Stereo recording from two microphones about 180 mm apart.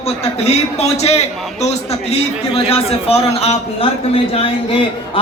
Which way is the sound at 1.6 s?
35° left (ahead or behind).